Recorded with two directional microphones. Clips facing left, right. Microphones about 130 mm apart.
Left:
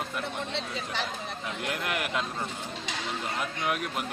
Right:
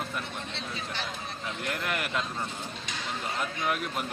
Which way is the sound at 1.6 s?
5° left (ahead or behind).